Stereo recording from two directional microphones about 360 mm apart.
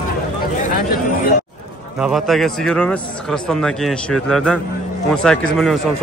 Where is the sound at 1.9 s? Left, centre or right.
Centre.